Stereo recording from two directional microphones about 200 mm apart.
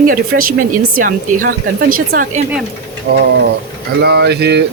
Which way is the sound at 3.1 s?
55° right (ahead or behind).